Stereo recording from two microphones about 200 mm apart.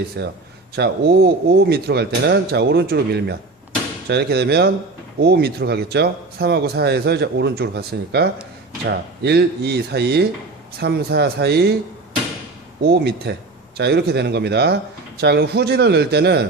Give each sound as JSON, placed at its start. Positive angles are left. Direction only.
{"t": 0.2, "sound": "a man's voice", "side_deg": -55}
{"t": 12.8, "sound": "a man's voice", "side_deg": -55}